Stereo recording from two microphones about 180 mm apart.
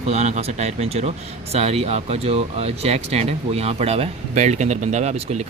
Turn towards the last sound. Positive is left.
turn(degrees=-40)  # may be behind; listen again after turning